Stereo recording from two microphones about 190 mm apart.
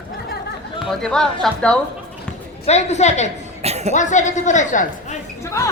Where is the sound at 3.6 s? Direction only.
35° right (ahead or behind).